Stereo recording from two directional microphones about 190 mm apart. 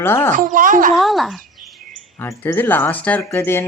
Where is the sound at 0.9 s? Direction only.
Centre (ahead or behind).